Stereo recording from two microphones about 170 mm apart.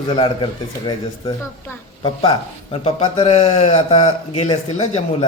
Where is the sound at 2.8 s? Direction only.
35° left (ahead or behind).